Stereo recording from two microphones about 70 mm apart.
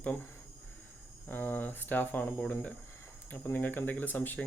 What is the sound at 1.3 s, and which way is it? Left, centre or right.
Speech, left.